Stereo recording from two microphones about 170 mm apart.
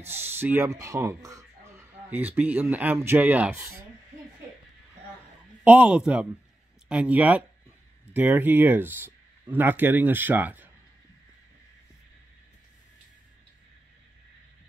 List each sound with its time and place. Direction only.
0.0 s speech: 15° right (ahead or behind)
5.6 s speech: 5° right (ahead or behind)